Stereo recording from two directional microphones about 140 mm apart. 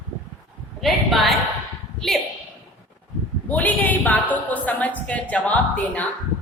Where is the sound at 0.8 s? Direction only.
Centre (ahead or behind).